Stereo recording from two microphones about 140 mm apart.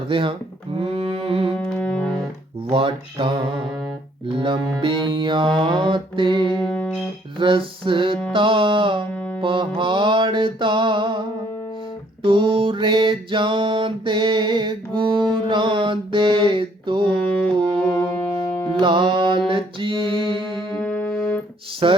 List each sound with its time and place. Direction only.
0.1 s music: 40° right (ahead or behind)
1.5 s music: 5° left (ahead or behind)
2.6 s music: 40° right (ahead or behind)
6.5 s music: 5° left (ahead or behind)
7.3 s music: 40° right (ahead or behind)
9.1 s music: 10° left (ahead or behind)
9.4 s music: 35° right (ahead or behind)
12.2 s mantra: 35° right (ahead or behind)
18.8 s music: 35° right (ahead or behind)
20.6 s music: 5° left (ahead or behind)
21.8 s music: 40° right (ahead or behind)